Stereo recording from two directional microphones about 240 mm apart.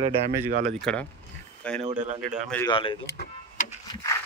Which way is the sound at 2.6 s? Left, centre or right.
Centre.